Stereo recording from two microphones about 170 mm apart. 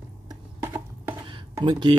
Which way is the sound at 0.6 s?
15° right (ahead or behind).